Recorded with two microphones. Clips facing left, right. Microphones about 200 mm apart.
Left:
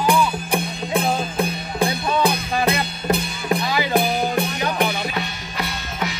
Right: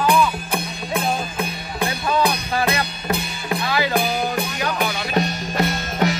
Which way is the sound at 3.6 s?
15° left (ahead or behind).